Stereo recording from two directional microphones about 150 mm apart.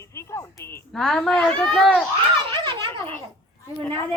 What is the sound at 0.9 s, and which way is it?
A woman's voice, 5° left (ahead or behind).